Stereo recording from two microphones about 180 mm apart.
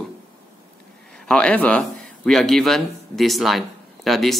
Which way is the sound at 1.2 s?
5° left (ahead or behind).